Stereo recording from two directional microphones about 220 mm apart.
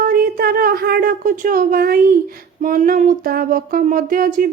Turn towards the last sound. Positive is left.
turn(degrees=-40)  # may be behind; listen again after turning